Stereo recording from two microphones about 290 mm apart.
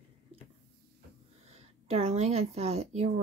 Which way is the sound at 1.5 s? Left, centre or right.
Right.